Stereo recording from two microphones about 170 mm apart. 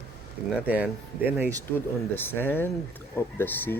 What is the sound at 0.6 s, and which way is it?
Speech, 10° right (ahead or behind).